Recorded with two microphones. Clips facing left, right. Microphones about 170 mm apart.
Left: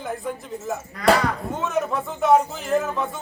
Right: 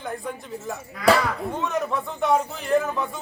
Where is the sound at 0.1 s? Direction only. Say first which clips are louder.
Left 3 dB; centre (ahead or behind).